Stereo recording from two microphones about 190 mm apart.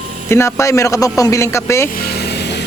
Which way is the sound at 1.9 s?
55° left (ahead or behind).